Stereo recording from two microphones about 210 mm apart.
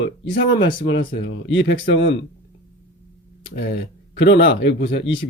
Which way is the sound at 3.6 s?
60° left (ahead or behind).